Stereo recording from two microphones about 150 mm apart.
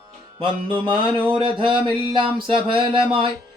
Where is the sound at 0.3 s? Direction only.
35° right (ahead or behind).